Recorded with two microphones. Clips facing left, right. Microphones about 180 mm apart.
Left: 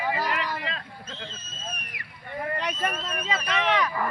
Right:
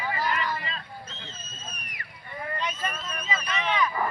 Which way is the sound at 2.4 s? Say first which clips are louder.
Left 3 dB; 60° left (ahead or behind).